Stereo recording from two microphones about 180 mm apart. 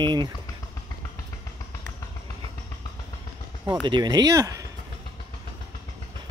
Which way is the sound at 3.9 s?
25° right (ahead or behind).